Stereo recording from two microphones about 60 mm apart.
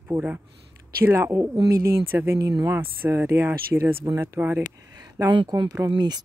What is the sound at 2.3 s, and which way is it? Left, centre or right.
Speech, right.